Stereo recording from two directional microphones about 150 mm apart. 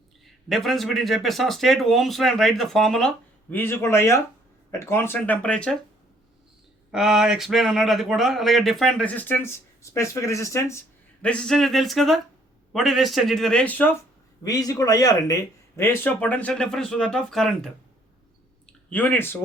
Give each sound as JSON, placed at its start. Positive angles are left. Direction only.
{"t": 0.4, "sound": "speech", "side_deg": 0}
{"t": 3.5, "sound": "speech", "side_deg": 15}
{"t": 6.9, "sound": "speech", "side_deg": -5}
{"t": 11.2, "sound": "speech", "side_deg": 5}
{"t": 14.4, "sound": "speech", "side_deg": 25}
{"t": 18.6, "sound": "a sound", "side_deg": 10}